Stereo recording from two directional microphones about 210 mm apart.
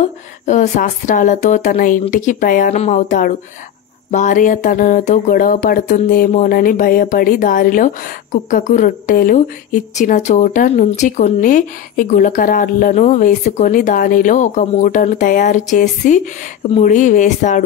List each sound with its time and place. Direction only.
0.0 s speech: 35° left (ahead or behind)